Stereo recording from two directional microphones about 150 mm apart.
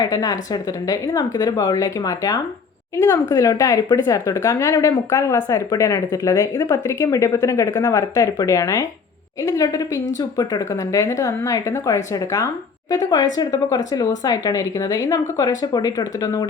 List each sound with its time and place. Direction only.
0.0 s a woman's voice: 25° left (ahead or behind)